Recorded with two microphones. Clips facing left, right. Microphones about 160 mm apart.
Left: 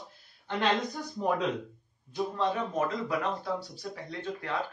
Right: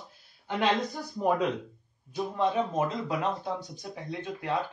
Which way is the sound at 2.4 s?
20° right (ahead or behind).